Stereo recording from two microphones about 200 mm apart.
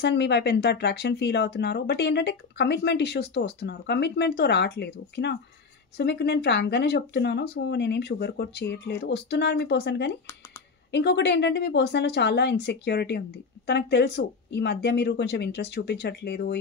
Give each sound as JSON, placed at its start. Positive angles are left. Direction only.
{"t": 0.0, "sound": "speech", "side_deg": 60}